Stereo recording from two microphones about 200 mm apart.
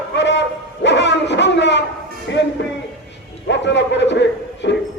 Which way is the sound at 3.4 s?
60° left (ahead or behind).